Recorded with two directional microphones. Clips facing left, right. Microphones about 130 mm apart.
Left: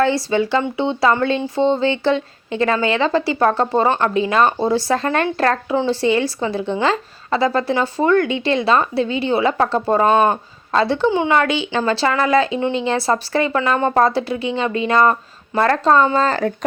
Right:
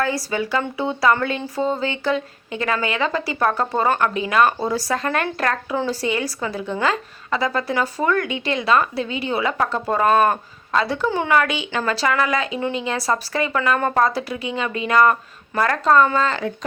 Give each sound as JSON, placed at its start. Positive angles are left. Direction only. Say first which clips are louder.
{"t": 0.0, "sound": "speech", "louder": "left 6 dB", "side_deg": 25}